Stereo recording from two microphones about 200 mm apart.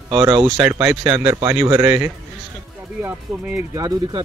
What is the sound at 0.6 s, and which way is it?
Speech, 5° right (ahead or behind).